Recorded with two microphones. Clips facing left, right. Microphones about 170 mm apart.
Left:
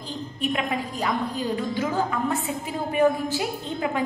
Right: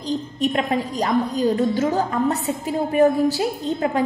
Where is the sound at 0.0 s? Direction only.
40° right (ahead or behind).